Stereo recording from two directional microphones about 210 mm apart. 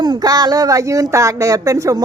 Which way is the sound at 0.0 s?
20° right (ahead or behind).